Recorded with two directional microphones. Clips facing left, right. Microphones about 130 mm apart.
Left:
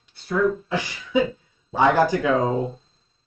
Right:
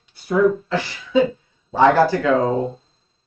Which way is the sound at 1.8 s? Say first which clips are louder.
Right 4 dB; 15° left (ahead or behind).